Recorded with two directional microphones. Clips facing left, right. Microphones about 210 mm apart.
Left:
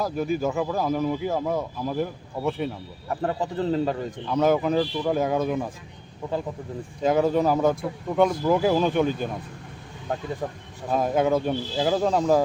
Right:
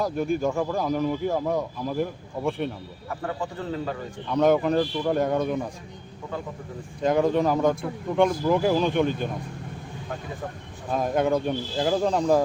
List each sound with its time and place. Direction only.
0.0 s speech: 5° left (ahead or behind)
3.2 s a man's voice: 35° left (ahead or behind)
4.3 s speech: centre (ahead or behind)
7.0 s speech: 5° left (ahead or behind)
10.9 s speech: 5° left (ahead or behind)